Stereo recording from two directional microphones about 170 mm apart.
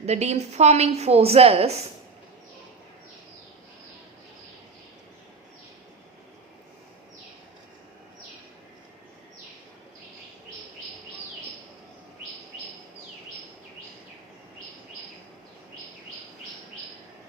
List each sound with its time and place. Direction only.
0.0 s a woman's voice: 40° right (ahead or behind)